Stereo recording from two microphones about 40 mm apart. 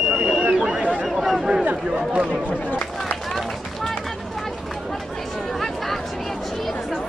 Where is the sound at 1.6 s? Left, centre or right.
Right.